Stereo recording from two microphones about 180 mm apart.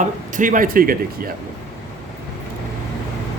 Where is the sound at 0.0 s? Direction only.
45° right (ahead or behind).